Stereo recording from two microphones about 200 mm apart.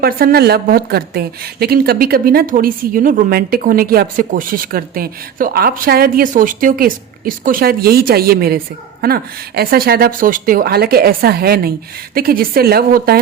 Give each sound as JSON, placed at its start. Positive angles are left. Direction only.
{"t": 0.0, "sound": "a woman's voice", "side_deg": -50}